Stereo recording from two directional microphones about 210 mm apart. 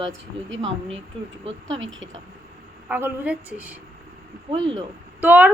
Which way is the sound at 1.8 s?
65° right (ahead or behind).